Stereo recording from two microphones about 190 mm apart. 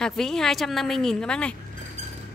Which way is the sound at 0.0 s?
Centre (ahead or behind).